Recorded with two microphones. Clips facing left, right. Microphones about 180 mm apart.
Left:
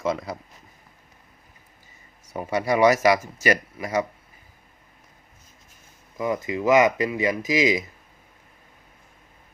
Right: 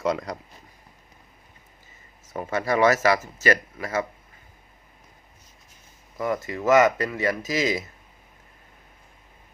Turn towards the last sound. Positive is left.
turn(degrees=15)  # may be behind; listen again after turning